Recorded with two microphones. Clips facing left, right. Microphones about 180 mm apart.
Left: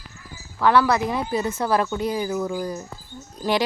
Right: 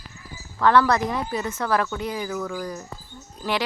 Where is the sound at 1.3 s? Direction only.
35° left (ahead or behind).